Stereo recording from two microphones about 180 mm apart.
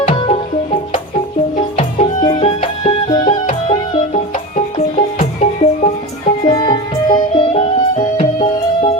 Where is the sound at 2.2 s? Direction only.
30° left (ahead or behind).